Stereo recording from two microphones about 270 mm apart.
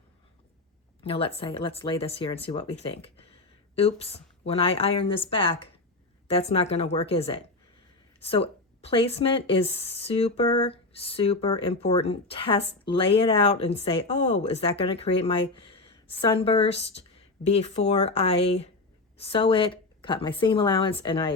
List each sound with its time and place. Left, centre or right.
1.0 s speech: left